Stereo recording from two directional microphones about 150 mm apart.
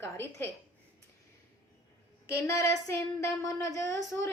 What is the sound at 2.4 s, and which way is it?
A woman's voice, 20° left (ahead or behind).